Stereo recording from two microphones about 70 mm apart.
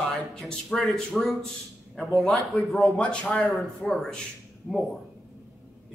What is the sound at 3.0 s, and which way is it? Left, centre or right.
A man's voice, centre.